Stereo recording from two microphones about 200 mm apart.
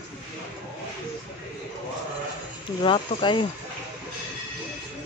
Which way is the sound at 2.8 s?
25° left (ahead or behind).